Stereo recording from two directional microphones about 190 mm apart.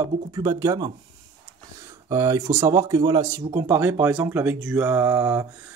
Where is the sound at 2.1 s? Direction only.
15° right (ahead or behind).